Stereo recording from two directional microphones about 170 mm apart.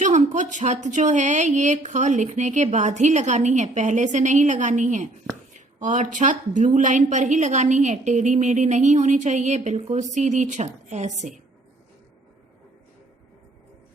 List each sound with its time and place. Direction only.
0.0 s a woman's voice: 45° right (ahead or behind)